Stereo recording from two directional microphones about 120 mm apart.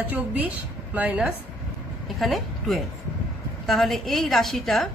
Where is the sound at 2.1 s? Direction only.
Centre (ahead or behind).